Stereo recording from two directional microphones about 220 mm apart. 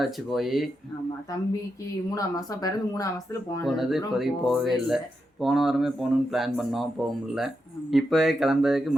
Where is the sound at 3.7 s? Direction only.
Centre (ahead or behind).